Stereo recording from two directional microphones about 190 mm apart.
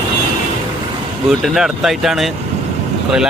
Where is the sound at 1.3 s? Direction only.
Centre (ahead or behind).